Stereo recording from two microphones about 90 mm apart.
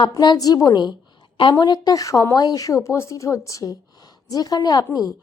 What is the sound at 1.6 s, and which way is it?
A woman's voice, 45° left (ahead or behind).